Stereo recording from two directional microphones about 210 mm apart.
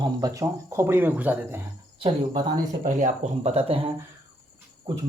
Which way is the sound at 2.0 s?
30° right (ahead or behind).